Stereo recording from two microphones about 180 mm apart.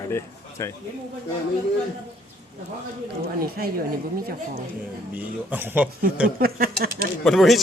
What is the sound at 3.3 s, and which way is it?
Speech, 60° right (ahead or behind).